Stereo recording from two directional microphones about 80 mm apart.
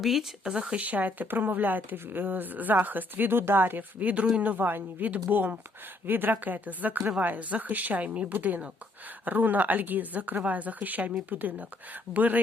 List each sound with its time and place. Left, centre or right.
0.0 s speech: centre; by 12.4 s right